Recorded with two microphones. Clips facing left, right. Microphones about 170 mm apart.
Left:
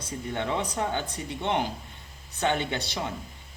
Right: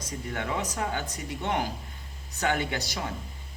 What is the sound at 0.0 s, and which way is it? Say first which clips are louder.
Speech: left 2 dB; 25° left (ahead or behind).